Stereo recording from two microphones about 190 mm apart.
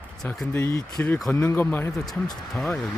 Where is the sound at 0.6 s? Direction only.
20° left (ahead or behind).